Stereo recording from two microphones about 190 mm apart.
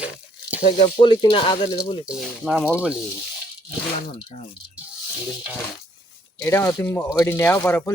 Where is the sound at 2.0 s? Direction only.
Centre (ahead or behind).